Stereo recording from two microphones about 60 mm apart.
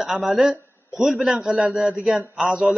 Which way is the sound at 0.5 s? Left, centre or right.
Left.